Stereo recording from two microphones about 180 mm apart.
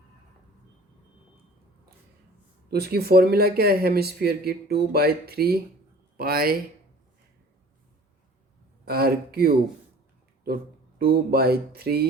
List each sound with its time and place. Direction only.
2.6 s speech: 60° right (ahead or behind)
8.8 s speech: 60° right (ahead or behind)